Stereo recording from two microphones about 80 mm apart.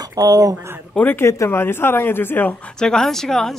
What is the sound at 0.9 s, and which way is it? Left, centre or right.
A woman's voice, left.